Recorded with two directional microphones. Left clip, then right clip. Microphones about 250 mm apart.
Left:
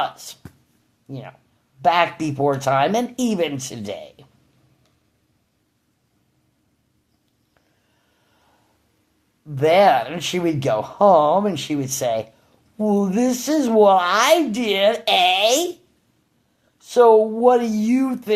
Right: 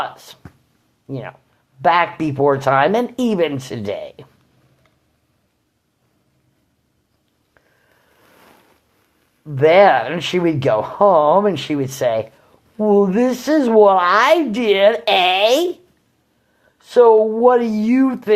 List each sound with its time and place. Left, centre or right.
0.0 s a woman's voice: centre
9.5 s a woman's voice: centre
16.7 s a woman's voice: centre